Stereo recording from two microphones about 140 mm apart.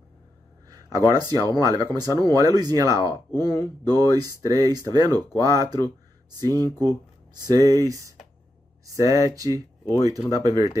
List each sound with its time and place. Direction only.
0.7 s a man's voice: 25° right (ahead or behind)